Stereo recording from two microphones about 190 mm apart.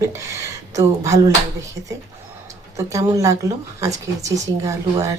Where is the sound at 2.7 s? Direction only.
15° right (ahead or behind).